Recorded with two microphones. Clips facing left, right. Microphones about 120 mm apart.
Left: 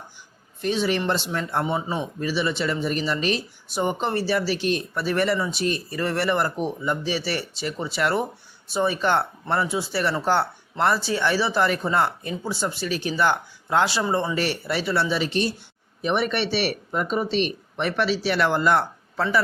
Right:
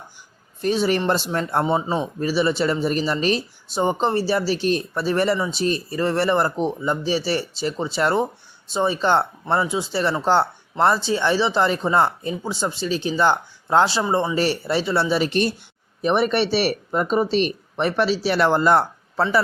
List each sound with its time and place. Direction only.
0.6 s speech: 40° right (ahead or behind)
1.6 s speech: 30° right (ahead or behind)
15.2 s speech: 55° right (ahead or behind)
16.0 s speech: 40° right (ahead or behind)